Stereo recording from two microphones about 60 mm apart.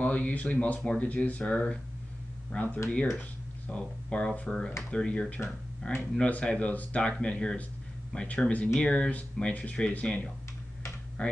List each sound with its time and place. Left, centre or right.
0.0 s speech: left